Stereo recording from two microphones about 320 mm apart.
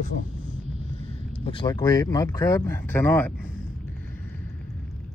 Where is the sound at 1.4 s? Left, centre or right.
Centre.